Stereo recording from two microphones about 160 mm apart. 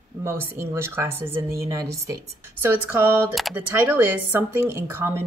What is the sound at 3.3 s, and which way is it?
Speech, centre (ahead or behind).